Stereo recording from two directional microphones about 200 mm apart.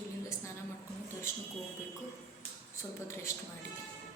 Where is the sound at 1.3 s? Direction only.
15° left (ahead or behind).